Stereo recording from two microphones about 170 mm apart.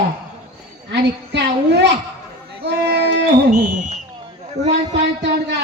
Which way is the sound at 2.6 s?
80° right.